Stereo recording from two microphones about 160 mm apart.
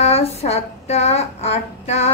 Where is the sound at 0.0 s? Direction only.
40° left (ahead or behind).